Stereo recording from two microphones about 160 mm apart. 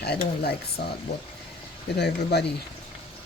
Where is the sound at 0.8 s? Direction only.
90° left.